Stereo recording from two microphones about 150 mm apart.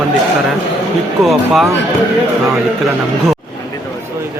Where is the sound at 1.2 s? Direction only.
Centre (ahead or behind).